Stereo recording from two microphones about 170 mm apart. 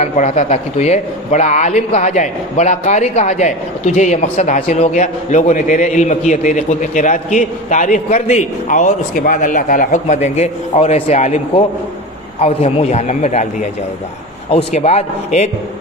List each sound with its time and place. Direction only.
0.0 s a man's voice: 45° left (ahead or behind)